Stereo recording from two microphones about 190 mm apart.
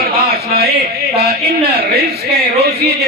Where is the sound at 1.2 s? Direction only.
55° right (ahead or behind).